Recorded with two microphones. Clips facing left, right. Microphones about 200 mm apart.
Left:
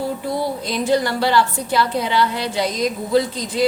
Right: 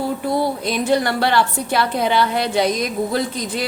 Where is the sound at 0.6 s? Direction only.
60° right (ahead or behind).